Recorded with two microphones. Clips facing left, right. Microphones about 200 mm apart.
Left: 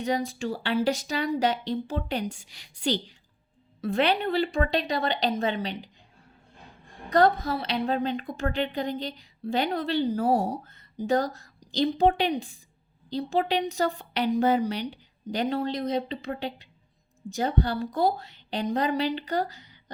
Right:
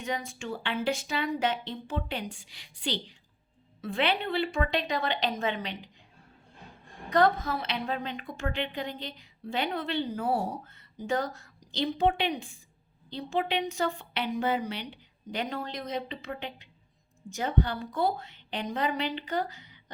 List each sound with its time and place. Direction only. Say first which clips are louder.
0.0 s a woman's voice: left 7 dB; 35° left (ahead or behind)
7.1 s a woman's voice: left 3 dB; 35° left (ahead or behind)